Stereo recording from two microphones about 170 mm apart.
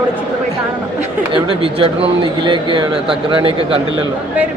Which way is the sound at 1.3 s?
30° right (ahead or behind).